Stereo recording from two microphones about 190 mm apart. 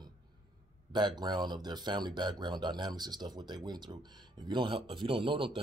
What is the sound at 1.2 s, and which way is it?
Speech, 20° right (ahead or behind).